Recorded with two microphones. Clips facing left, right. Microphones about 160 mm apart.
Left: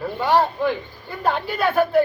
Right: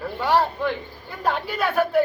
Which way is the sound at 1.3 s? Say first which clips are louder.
Left 2 dB; 10° right (ahead or behind).